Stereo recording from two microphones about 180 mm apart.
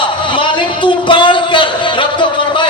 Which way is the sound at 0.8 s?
25° left (ahead or behind).